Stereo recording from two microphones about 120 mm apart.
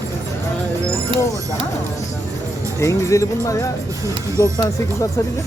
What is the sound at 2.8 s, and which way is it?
Speech, 25° left (ahead or behind).